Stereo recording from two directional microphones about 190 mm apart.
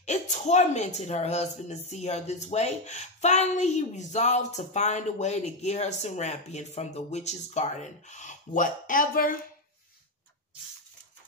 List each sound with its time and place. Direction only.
0.0 s speech: 35° left (ahead or behind)